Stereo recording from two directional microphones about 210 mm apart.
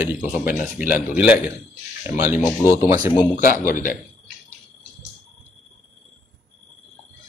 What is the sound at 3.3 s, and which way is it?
Speech, 40° left (ahead or behind).